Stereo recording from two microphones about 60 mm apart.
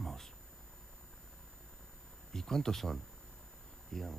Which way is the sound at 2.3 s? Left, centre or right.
Centre.